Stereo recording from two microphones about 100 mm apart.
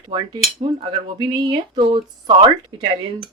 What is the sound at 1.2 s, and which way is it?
Speech, 45° right (ahead or behind).